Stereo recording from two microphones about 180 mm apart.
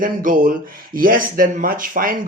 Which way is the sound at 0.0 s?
50° right (ahead or behind).